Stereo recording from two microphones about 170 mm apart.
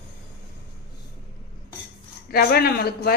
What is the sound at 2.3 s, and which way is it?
Speech, 60° left (ahead or behind).